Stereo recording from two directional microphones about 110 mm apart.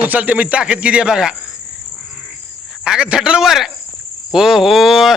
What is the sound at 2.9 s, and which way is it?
Speech, 10° right (ahead or behind).